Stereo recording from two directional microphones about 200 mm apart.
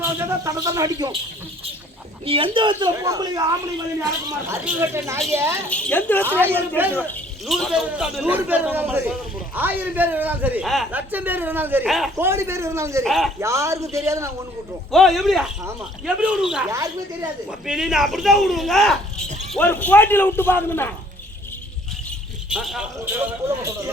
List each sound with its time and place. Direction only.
0.0 s a man's voice: 15° right (ahead or behind)
2.2 s a woman's voice: 25° right (ahead or behind)
5.6 s a man's voice: 5° left (ahead or behind)
6.4 s a man's voice: 10° right (ahead or behind)
7.1 s a man's voice: centre (ahead or behind)
12.1 s a man's voice: 15° right (ahead or behind)
13.1 s speech: centre (ahead or behind)
13.4 s a man's voice: 15° right (ahead or behind)
14.9 s speech: centre (ahead or behind)
16.6 s a man's voice: 15° right (ahead or behind)
17.7 s a man's voice: 5° right (ahead or behind)
22.4 s speech: 5° right (ahead or behind)